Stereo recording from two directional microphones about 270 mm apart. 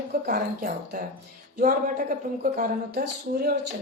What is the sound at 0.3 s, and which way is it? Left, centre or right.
Speech, right.